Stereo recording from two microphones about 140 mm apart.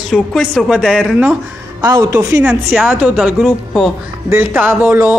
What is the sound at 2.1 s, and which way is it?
A man's voice, 10° right (ahead or behind).